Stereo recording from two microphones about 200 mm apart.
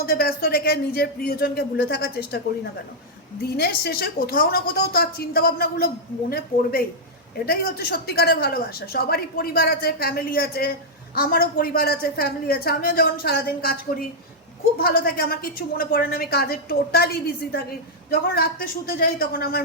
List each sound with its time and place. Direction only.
0.0 s a woman's voice: 50° left (ahead or behind)
3.6 s a woman's voice: 50° left (ahead or behind)